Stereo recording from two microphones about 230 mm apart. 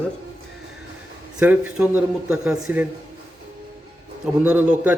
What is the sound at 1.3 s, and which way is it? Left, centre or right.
Dishes, centre.